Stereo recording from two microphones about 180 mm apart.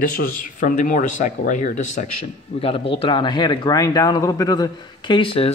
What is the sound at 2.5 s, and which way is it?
Speech, 30° left (ahead or behind).